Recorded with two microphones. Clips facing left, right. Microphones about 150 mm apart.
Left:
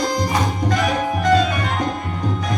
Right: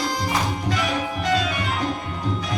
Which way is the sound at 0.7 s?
45° left (ahead or behind).